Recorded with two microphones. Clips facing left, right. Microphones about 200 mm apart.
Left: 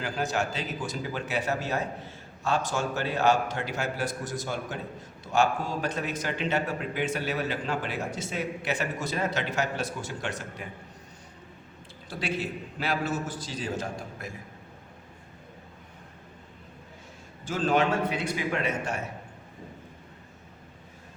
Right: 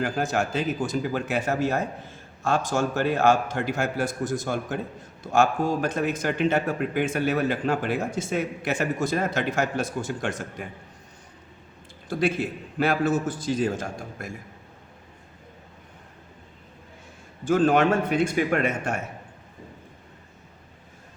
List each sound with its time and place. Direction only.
0.0 s a man's voice: 50° right (ahead or behind)
12.0 s a man's voice: 50° right (ahead or behind)
17.4 s a man's voice: 55° right (ahead or behind)